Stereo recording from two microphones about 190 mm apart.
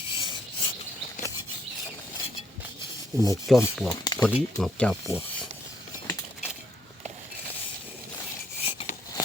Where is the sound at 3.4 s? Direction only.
Centre (ahead or behind).